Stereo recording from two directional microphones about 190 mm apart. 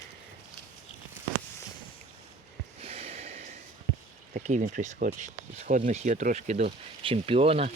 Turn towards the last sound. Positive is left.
turn(degrees=-30)  # may be behind; listen again after turning